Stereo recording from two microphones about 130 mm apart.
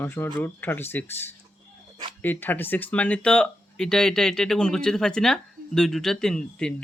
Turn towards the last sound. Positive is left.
turn(degrees=5)  # may be behind; listen again after turning